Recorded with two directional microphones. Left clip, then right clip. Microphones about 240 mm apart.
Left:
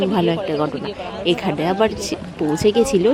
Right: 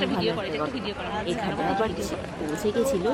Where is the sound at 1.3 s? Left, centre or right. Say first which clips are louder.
Left 9 dB; left.